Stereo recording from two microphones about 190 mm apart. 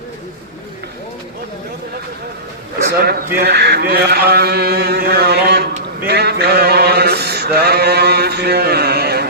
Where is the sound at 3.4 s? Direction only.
60° right (ahead or behind).